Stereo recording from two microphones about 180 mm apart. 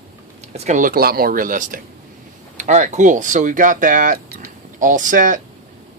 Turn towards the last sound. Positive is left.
turn(degrees=-45)  # may be behind; listen again after turning